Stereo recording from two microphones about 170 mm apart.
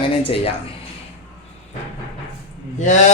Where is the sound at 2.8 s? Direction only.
45° left (ahead or behind).